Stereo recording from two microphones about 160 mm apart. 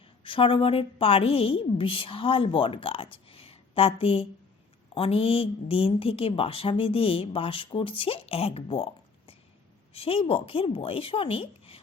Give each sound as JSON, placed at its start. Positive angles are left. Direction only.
{"t": 0.3, "sound": "a woman's voice", "side_deg": 30}